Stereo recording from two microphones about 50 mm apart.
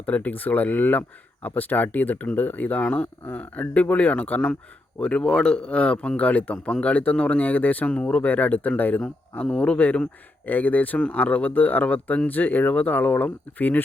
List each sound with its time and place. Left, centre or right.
0.0 s speech: left
2.8 s speech: left
10.4 s speech: left